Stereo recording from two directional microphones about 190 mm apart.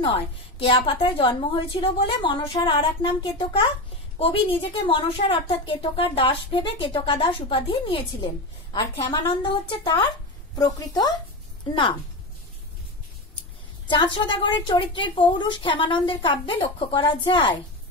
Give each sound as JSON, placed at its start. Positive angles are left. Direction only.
{"t": 0.0, "sound": "a woman's voice", "side_deg": 25}
{"t": 9.4, "sound": "a woman's voice", "side_deg": 25}
{"t": 13.8, "sound": "a woman's voice", "side_deg": 25}